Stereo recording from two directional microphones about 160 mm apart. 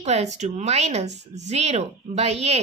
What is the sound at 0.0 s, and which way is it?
A woman's voice, 45° right (ahead or behind).